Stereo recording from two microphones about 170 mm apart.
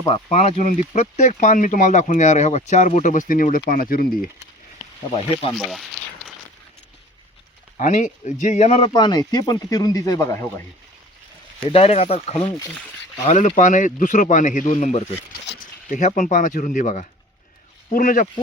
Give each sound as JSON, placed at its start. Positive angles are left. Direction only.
{"t": 0.1, "sound": "speech", "side_deg": 40}
{"t": 5.1, "sound": "speech", "side_deg": 35}
{"t": 5.5, "sound": "a sound", "side_deg": 0}
{"t": 7.8, "sound": "speech", "side_deg": 45}
{"t": 8.9, "sound": "speech", "side_deg": 25}
{"t": 11.6, "sound": "speech", "side_deg": 35}